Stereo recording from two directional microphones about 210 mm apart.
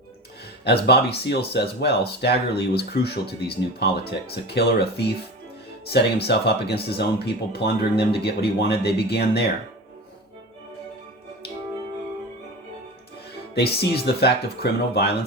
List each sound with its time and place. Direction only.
0.6 s speech: 50° left (ahead or behind)
13.5 s speech: 50° left (ahead or behind)